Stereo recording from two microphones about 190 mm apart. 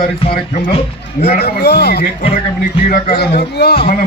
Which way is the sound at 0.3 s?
50° left (ahead or behind).